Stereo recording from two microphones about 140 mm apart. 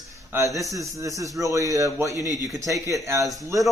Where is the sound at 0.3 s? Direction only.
20° right (ahead or behind).